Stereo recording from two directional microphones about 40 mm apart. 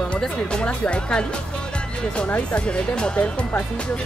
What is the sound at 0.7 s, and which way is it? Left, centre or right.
Speech, left.